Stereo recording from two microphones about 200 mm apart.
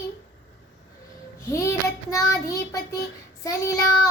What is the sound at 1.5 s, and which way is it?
Child singing, 15° left (ahead or behind).